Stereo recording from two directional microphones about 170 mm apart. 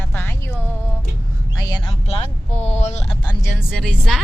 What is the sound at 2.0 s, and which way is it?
Speech, 40° left (ahead or behind).